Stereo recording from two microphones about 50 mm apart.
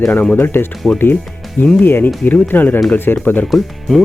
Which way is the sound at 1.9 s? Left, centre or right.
Left.